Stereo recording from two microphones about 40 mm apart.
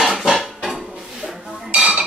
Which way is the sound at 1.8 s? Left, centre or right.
Right.